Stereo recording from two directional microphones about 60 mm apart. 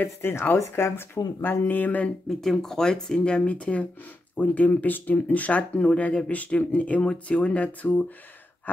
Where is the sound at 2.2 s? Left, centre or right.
Centre.